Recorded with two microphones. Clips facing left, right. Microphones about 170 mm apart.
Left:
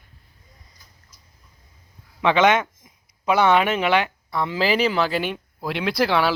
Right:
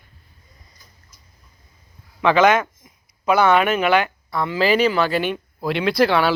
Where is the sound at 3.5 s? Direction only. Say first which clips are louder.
Right 2 dB; 25° left (ahead or behind).